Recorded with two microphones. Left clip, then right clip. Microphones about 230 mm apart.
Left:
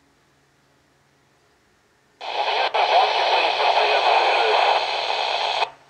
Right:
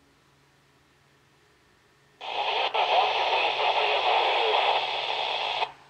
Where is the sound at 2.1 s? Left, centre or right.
Centre.